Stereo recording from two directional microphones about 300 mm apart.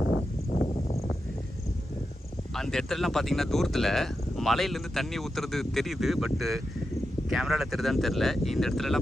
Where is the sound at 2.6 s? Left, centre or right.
Centre.